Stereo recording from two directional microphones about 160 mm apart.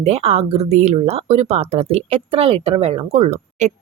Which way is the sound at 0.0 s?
40° right (ahead or behind).